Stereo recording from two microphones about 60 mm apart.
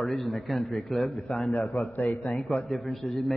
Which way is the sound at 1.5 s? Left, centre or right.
Left.